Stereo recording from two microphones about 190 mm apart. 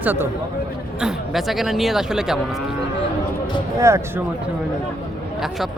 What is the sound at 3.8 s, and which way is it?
Speech, 15° right (ahead or behind).